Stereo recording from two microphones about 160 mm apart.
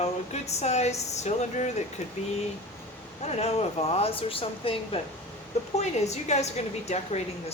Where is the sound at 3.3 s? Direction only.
40° left (ahead or behind).